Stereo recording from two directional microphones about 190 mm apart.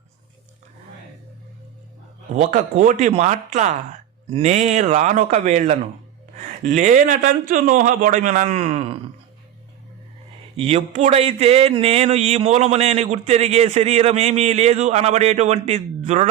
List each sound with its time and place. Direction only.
2.3 s speech: 40° right (ahead or behind)
10.6 s speech: 30° right (ahead or behind)